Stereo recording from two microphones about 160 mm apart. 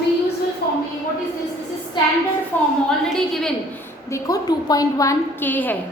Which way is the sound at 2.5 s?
10° left (ahead or behind).